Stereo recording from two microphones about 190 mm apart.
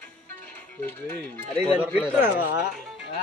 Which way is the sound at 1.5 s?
Centre (ahead or behind).